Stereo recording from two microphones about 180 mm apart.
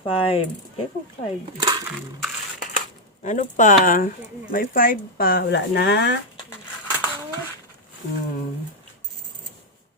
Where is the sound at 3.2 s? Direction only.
45° left (ahead or behind).